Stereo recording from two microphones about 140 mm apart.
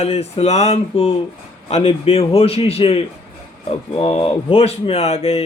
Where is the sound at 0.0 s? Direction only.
50° left (ahead or behind).